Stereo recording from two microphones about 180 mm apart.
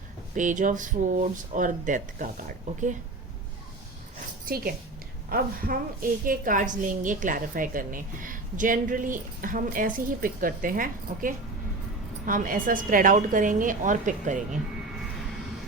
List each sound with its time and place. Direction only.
0.3 s a woman's voice: 45° right (ahead or behind)
4.4 s a woman's voice: 55° right (ahead or behind)